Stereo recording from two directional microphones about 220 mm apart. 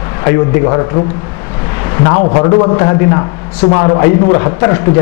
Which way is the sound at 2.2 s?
25° left (ahead or behind).